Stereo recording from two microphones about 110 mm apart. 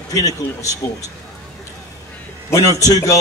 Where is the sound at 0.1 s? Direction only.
30° left (ahead or behind).